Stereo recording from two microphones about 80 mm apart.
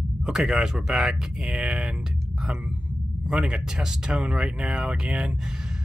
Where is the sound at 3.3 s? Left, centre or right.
Centre.